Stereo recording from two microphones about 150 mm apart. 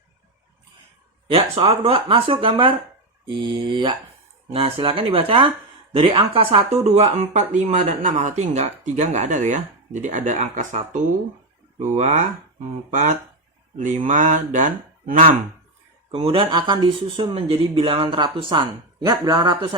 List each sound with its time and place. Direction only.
1.3 s speech: 40° right (ahead or behind); by 10.8 s 55° right (ahead or behind)
11.8 s speech: 50° right (ahead or behind)
13.7 s mantra: 55° right (ahead or behind)
16.1 s speech: 40° right (ahead or behind)